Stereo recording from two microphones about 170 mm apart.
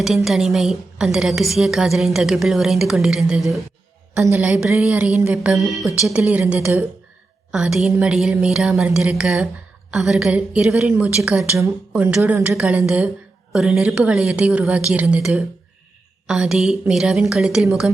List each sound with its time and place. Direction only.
0.3 s a woman's voice: centre (ahead or behind)
11.5 s a woman's voice: 15° right (ahead or behind)